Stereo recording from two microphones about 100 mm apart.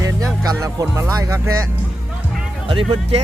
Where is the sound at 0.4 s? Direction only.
35° right (ahead or behind).